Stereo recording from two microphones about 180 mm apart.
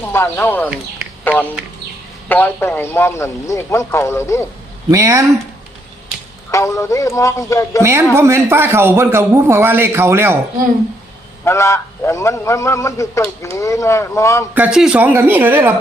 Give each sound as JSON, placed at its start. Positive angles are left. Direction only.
{"t": 0.0, "sound": "speech", "side_deg": 10}
{"t": 4.9, "sound": "a man's voice", "side_deg": -15}
{"t": 6.5, "sound": "speech", "side_deg": 15}
{"t": 7.8, "sound": "a man's voice", "side_deg": -15}
{"t": 11.4, "sound": "speech", "side_deg": 15}
{"t": 14.5, "sound": "a man's voice", "side_deg": -5}